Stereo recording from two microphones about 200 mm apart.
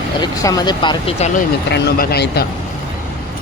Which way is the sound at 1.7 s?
55° left (ahead or behind).